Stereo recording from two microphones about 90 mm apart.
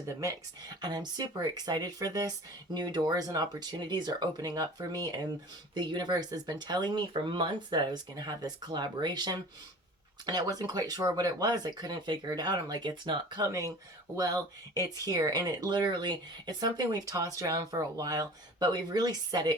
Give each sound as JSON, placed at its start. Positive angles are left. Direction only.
{"t": 0.1, "sound": "speech", "side_deg": -35}
{"t": 0.8, "sound": "speech", "side_deg": -50}
{"t": 13.5, "sound": "speech", "side_deg": -40}